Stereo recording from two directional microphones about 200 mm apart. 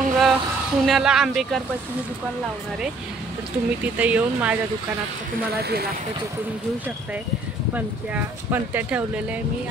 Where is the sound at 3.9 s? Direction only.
5° right (ahead or behind).